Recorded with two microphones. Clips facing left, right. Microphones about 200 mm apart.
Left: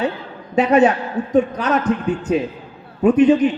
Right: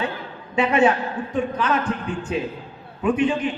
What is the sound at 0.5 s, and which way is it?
A man's voice, 40° left (ahead or behind).